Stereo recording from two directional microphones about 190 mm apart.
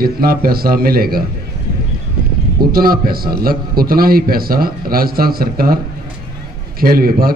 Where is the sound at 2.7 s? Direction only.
50° right (ahead or behind).